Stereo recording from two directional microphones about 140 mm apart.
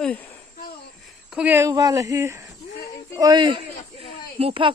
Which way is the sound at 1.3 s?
10° right (ahead or behind).